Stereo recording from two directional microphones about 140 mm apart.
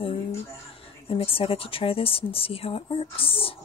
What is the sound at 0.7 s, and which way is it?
Speech, 40° left (ahead or behind).